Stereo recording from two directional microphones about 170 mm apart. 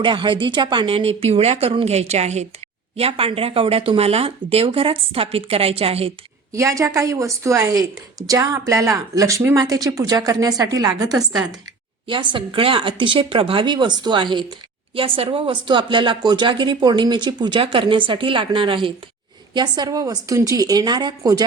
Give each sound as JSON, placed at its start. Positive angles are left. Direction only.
{"t": 0.0, "sound": "speech", "side_deg": -30}
{"t": 6.5, "sound": "speech", "side_deg": -20}